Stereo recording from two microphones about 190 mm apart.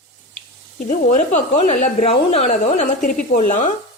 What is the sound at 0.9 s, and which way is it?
Speech, 35° left (ahead or behind).